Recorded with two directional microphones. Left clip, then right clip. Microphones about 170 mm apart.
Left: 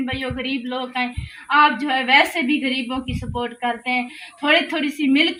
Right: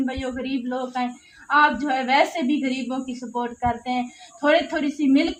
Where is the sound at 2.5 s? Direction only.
15° right (ahead or behind).